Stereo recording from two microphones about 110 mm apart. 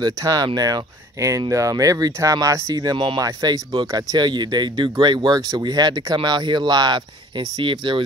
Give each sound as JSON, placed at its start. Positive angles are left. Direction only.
{"t": 0.0, "sound": "speech", "side_deg": -35}